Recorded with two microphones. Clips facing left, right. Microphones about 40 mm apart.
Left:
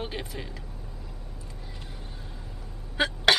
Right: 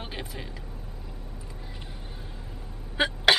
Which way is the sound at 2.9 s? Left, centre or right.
Centre.